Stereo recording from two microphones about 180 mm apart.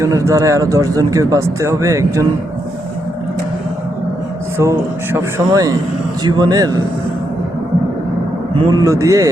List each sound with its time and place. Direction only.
0.0 s speech: 15° right (ahead or behind)
4.5 s a man's voice: 15° right (ahead or behind)
8.5 s a man's voice: 20° right (ahead or behind)